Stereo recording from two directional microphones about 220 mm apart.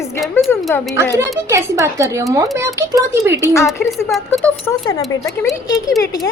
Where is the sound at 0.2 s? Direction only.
5° left (ahead or behind).